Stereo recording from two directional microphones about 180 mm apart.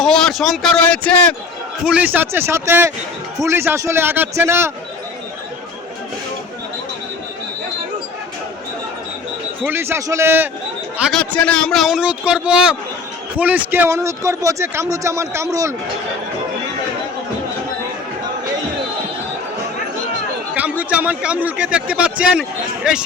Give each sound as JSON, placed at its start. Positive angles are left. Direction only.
{"t": 0.0, "sound": "speech", "side_deg": 0}
{"t": 1.8, "sound": "a man's voice", "side_deg": -5}
{"t": 9.6, "sound": "a man's voice", "side_deg": -15}
{"t": 11.2, "sound": "a man's voice", "side_deg": 5}
{"t": 20.6, "sound": "a man's voice", "side_deg": -5}